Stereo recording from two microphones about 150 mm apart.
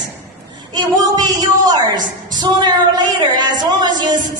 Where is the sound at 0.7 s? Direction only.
25° right (ahead or behind).